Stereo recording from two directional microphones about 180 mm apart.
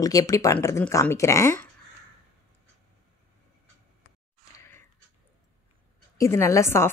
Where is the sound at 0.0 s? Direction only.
20° left (ahead or behind).